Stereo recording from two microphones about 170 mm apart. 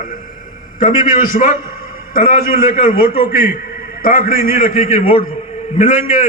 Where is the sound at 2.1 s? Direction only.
55° left (ahead or behind).